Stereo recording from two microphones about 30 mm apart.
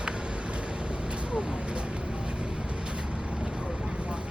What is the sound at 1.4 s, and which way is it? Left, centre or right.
Speech, right.